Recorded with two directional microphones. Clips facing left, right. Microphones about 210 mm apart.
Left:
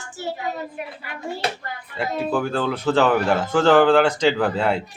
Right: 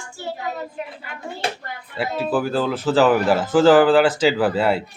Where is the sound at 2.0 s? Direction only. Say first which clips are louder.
Right 1 dB; 5° right (ahead or behind).